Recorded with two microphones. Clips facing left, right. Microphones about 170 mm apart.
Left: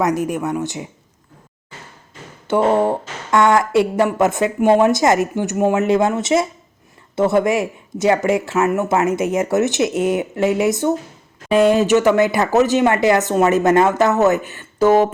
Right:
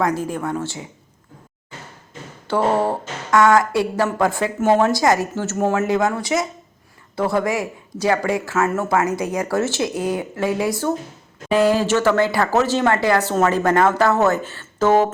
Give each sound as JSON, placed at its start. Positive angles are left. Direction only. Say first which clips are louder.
{"t": 0.0, "sound": "speech", "louder": "left 3 dB", "side_deg": 20}
{"t": 2.5, "sound": "speech", "louder": "left 3 dB", "side_deg": 20}